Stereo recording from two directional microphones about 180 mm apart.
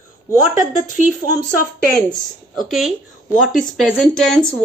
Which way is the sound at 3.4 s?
Centre (ahead or behind).